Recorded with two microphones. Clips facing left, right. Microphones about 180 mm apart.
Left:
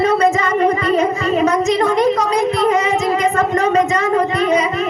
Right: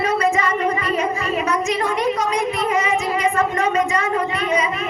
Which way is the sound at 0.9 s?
35° left (ahead or behind).